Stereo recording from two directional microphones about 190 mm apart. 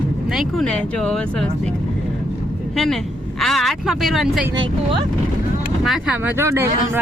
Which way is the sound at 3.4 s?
Centre (ahead or behind).